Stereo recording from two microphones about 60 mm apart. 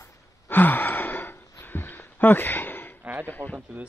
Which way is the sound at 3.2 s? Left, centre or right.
Left.